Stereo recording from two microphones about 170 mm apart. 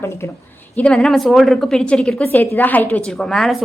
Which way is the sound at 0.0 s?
15° left (ahead or behind).